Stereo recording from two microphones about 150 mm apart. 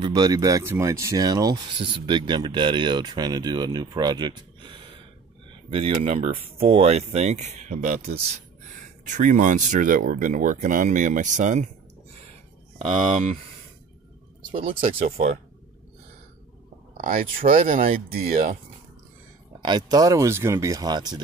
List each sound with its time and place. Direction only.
0.0 s speech: 25° right (ahead or behind); by 8.2 s 75° right (ahead or behind)
9.0 s speech: 55° right (ahead or behind)
14.7 s speech: 70° right (ahead or behind)
16.9 s speech: 65° right (ahead or behind)
19.6 s speech: 30° right (ahead or behind)